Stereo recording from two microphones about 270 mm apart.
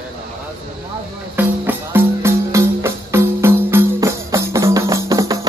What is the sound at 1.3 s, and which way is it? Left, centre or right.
Music, centre.